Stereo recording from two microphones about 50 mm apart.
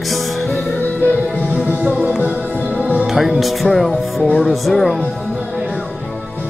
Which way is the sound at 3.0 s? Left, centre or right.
Centre.